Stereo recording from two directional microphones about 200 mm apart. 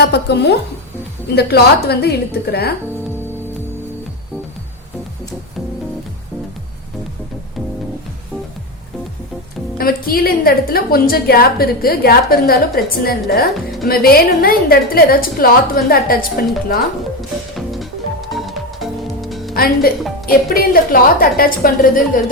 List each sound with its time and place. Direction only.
0.0 s a woman's voice: 55° left (ahead or behind)
9.7 s a woman's voice: 50° left (ahead or behind)
18.3 s music: centre (ahead or behind)
19.5 s a woman's voice: 50° left (ahead or behind)